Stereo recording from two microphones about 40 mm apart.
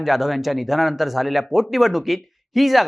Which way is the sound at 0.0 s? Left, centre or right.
Centre.